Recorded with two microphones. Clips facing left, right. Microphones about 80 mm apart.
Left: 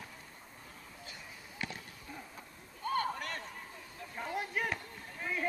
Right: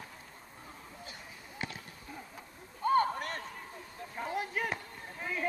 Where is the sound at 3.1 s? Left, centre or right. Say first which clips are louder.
Right 3 dB; right.